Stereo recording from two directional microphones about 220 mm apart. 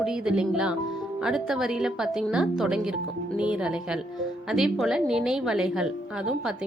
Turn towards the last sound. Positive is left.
turn(degrees=-5)  # may be behind; listen again after turning